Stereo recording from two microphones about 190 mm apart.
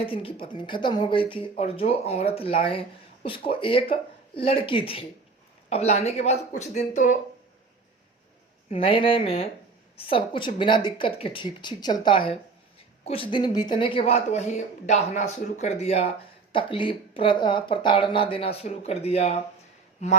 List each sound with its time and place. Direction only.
0.0 s a woman's voice: 30° left (ahead or behind)
8.7 s a woman's voice: 30° left (ahead or behind)